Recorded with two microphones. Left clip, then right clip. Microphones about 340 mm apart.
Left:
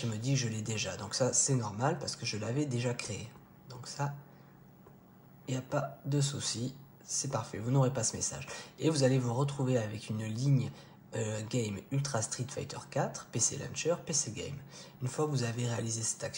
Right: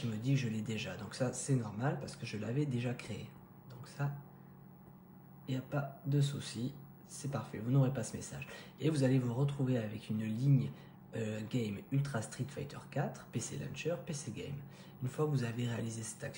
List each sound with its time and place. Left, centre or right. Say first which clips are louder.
0.2 s speech: left 1 dB; centre
5.5 s speech: left 5 dB; centre